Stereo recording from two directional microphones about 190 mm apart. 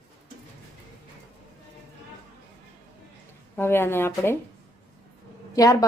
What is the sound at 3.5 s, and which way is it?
Speech, 10° left (ahead or behind).